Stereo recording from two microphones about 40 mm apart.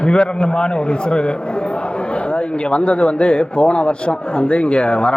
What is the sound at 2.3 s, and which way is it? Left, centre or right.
A man's voice, left.